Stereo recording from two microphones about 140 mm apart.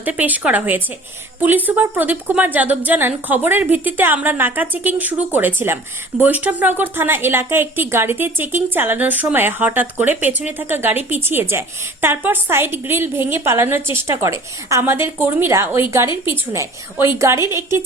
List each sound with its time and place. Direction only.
0.0 s a woman's voice: 10° right (ahead or behind)